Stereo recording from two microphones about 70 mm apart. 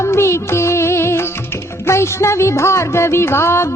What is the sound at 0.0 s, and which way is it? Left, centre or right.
Music, left.